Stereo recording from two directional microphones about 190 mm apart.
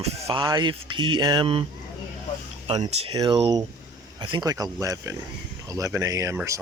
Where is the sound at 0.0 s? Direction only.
25° right (ahead or behind).